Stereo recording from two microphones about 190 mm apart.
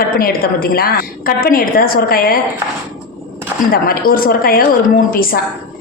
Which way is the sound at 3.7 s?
50° left (ahead or behind).